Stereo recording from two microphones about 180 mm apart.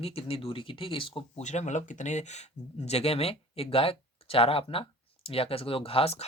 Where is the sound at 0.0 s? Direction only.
35° left (ahead or behind).